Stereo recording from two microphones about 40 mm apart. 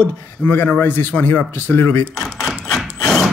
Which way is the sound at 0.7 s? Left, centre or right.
Left.